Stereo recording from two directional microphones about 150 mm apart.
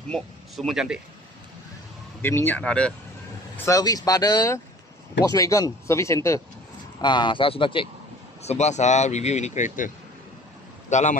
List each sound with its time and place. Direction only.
0.1 s speech: centre (ahead or behind)
2.2 s speech: 15° left (ahead or behind)
3.5 s speech: 20° left (ahead or behind)
7.0 s speech: 30° left (ahead or behind)
8.4 s speech: 45° left (ahead or behind)